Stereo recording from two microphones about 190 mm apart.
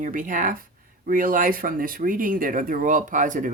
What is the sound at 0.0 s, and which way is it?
Speech, 45° right (ahead or behind).